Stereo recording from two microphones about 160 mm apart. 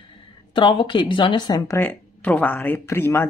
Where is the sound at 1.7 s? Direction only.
10° left (ahead or behind).